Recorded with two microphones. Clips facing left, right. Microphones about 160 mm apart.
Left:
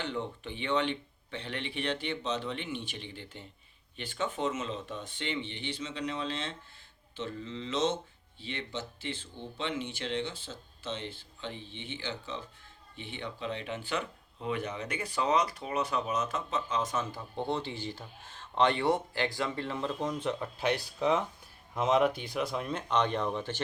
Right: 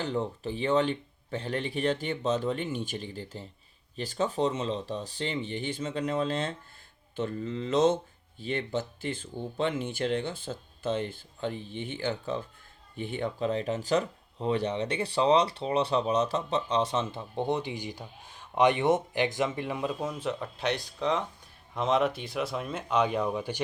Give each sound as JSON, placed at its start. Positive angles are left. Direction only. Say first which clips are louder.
{"t": 0.0, "sound": "speech", "louder": "right 5 dB", "side_deg": -40}